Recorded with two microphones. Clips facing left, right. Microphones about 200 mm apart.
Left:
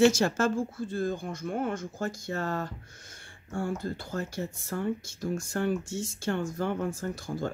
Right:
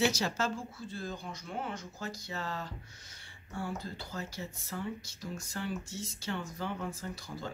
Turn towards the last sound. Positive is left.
turn(degrees=50)  # may be behind; listen again after turning